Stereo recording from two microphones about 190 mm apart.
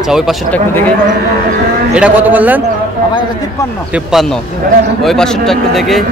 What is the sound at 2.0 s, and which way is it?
Speech, 5° right (ahead or behind).